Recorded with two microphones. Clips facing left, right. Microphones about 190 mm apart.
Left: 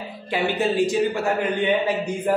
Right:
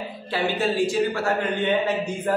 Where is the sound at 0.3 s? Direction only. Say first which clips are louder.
Left 2 dB; 15° left (ahead or behind).